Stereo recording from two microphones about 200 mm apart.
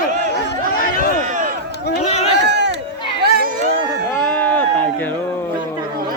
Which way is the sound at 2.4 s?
60° right (ahead or behind).